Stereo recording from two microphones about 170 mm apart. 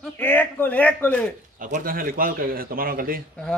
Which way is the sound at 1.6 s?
55° right (ahead or behind).